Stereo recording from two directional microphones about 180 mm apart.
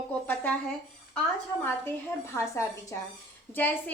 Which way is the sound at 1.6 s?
15° left (ahead or behind).